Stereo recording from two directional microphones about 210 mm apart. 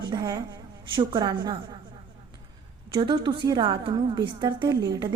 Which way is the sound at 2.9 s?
20° right (ahead or behind).